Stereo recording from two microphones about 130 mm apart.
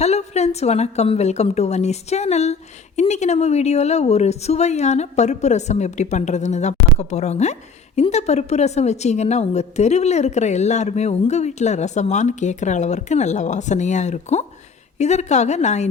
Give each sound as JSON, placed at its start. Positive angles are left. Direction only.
{"t": 0.0, "sound": "a woman's voice", "side_deg": 55}